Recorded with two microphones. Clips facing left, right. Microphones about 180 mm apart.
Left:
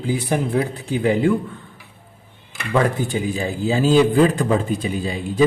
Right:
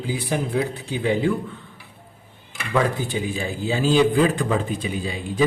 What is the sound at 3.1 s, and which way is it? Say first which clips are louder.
A man's voice: left 3 dB; 40° left (ahead or behind).